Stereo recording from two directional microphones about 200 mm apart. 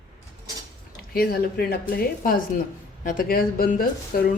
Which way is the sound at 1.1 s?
50° left (ahead or behind).